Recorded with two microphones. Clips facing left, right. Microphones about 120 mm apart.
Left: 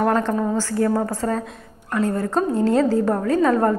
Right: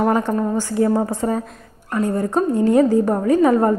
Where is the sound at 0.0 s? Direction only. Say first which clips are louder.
Right 1 dB; 10° right (ahead or behind).